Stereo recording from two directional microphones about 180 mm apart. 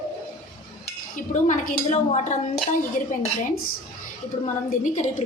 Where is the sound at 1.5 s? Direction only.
45° left (ahead or behind).